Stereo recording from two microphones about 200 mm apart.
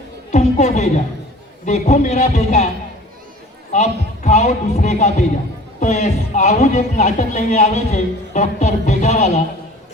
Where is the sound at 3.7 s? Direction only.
35° left (ahead or behind).